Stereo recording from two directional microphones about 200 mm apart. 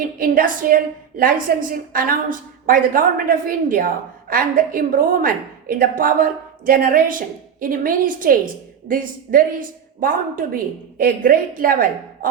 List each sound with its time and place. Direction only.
0.0 s a woman's voice: 45° right (ahead or behind)